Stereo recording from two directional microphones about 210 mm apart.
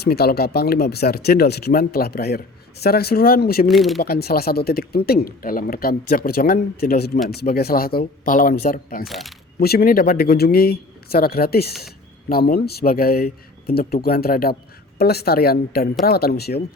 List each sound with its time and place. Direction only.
0.0 s speech: 50° left (ahead or behind)
3.7 s speech: centre (ahead or behind)
4.0 s speech: 50° left (ahead or behind)
9.0 s speech: centre (ahead or behind)
9.6 s speech: 45° left (ahead or behind)